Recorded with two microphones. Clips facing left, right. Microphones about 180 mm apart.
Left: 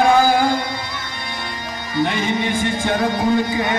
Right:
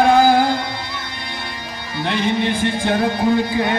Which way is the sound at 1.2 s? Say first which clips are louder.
Left 1 dB; 45° left (ahead or behind).